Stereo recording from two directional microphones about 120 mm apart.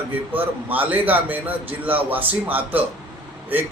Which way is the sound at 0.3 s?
15° right (ahead or behind).